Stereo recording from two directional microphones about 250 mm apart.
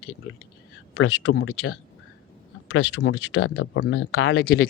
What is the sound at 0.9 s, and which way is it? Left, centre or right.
Speech, left.